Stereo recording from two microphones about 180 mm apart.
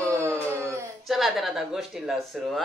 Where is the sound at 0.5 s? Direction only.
15° right (ahead or behind).